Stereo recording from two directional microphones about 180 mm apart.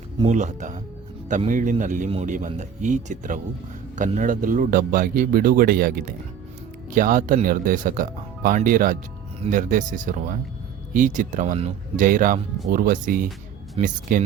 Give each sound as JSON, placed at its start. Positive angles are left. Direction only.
{"t": 0.3, "sound": "a man's voice", "side_deg": -40}